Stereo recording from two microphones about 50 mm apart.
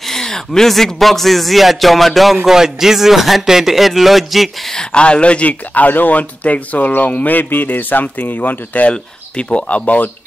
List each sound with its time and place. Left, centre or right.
0.1 s speech: centre
4.7 s speech: centre
8.9 s speech: left